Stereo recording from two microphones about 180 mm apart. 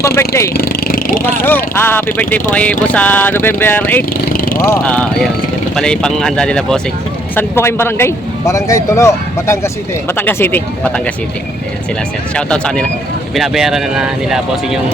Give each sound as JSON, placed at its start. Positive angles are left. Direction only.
{"t": 0.0, "sound": "vehicle", "side_deg": 15}
{"t": 0.5, "sound": "a sound", "side_deg": 55}
{"t": 1.2, "sound": "speech", "side_deg": 10}
{"t": 4.3, "sound": "vehicle", "side_deg": 50}
{"t": 4.7, "sound": "speech", "side_deg": 10}
{"t": 12.3, "sound": "speech", "side_deg": 5}